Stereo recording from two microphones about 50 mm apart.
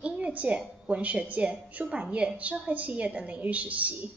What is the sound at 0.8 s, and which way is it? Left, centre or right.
A woman's voice, right.